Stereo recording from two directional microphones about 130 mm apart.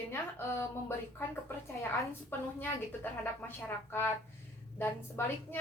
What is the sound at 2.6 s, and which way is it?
A woman's voice, 15° left (ahead or behind).